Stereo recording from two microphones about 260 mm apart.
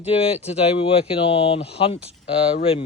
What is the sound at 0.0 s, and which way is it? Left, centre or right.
Speech, left.